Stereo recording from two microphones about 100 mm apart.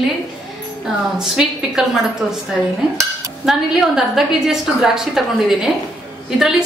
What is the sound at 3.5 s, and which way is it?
A woman's voice, 5° right (ahead or behind).